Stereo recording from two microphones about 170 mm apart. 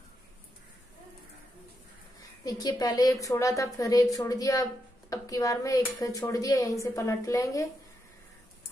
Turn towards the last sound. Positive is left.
turn(degrees=20)  # may be behind; listen again after turning